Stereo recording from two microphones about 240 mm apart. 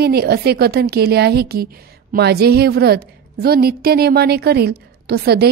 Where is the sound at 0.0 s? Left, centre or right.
Right.